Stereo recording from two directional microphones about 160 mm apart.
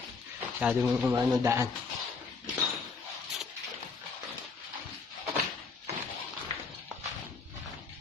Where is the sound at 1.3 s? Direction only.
20° right (ahead or behind).